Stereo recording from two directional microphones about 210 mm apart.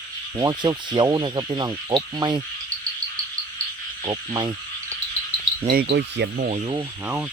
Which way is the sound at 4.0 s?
20° right (ahead or behind).